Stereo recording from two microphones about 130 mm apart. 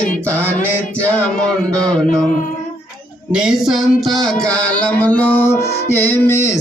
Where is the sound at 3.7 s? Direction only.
Centre (ahead or behind).